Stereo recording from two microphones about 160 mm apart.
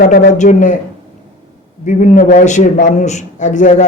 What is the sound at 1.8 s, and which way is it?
A man's voice, 50° left (ahead or behind).